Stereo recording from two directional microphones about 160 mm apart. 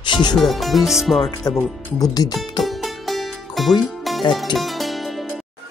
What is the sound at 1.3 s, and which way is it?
Speech, 20° left (ahead or behind).